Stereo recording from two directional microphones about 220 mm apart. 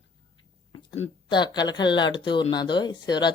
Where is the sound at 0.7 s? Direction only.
20° left (ahead or behind).